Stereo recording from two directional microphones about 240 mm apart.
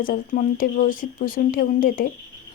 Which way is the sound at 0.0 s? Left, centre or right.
Left.